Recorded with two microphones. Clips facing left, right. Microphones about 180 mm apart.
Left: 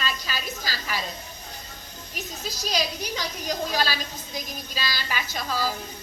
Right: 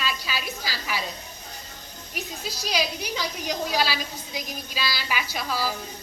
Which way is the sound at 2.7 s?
10° right (ahead or behind).